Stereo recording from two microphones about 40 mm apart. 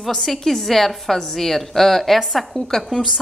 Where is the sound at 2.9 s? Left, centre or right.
Centre.